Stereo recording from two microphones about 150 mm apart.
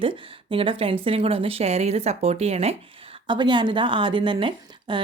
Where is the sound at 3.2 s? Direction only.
30° right (ahead or behind).